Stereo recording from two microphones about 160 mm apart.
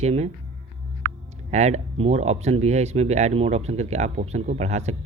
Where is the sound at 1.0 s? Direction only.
90° right.